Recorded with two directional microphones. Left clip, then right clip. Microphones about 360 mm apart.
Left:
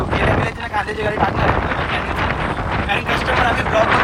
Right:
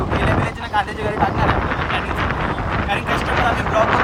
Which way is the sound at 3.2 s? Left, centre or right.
Right.